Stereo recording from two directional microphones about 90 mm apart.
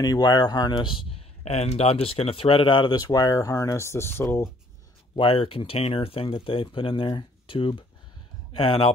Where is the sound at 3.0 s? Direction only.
45° left (ahead or behind); by 4.5 s 25° left (ahead or behind).